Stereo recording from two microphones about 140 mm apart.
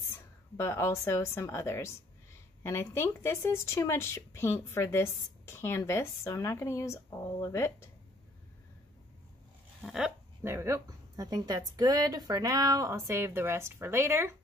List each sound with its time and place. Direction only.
0.6 s speech: 20° left (ahead or behind)
9.8 s speech: 5° right (ahead or behind)
10.4 s a woman's voice: 20° right (ahead or behind)